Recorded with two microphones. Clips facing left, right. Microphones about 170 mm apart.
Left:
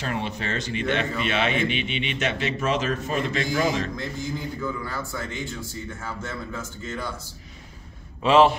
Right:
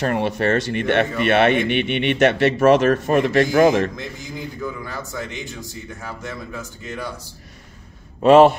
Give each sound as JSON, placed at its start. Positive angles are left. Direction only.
{"t": 0.0, "sound": "speech", "side_deg": -55}
{"t": 3.9, "sound": "a man's voice", "side_deg": -20}
{"t": 8.2, "sound": "a man's voice", "side_deg": -45}